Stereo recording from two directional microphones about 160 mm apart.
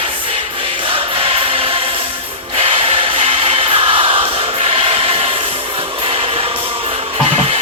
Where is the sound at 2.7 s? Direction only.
35° right (ahead or behind).